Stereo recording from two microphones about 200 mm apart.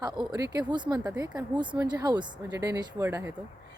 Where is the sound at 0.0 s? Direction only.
20° right (ahead or behind).